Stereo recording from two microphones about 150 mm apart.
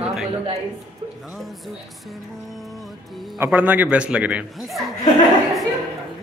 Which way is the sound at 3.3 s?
15° right (ahead or behind).